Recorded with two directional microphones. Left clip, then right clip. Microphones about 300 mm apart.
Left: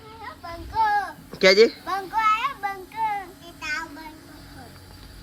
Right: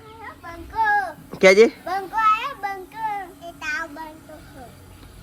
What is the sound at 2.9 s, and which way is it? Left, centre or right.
Child singing, centre.